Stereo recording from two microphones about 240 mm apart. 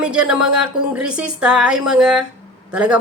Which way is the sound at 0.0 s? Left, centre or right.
Centre.